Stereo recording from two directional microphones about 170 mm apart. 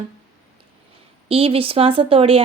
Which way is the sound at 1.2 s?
35° right (ahead or behind).